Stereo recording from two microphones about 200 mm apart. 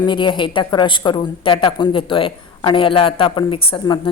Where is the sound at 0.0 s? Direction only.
25° left (ahead or behind).